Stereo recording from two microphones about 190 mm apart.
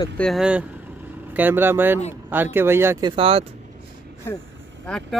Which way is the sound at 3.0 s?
30° right (ahead or behind).